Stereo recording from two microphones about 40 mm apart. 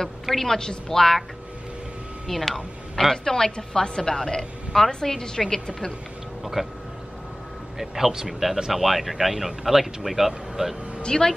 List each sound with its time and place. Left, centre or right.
0.3 s a woman's voice: centre
2.2 s speech: centre
3.3 s a woman's voice: centre
6.4 s speech: centre
7.8 s speech: centre
11.0 s speech: centre